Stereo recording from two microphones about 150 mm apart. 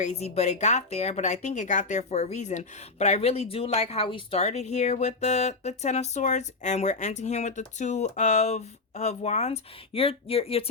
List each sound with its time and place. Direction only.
0.0 s speech: 45° left (ahead or behind)